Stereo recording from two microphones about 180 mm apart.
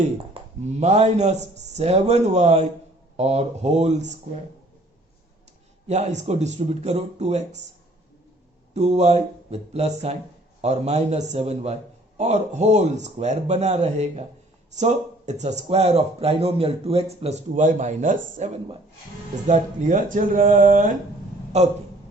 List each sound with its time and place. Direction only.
0.6 s speech: 40° right (ahead or behind)
5.9 s speech: 40° right (ahead or behind)
8.7 s speech: 40° right (ahead or behind)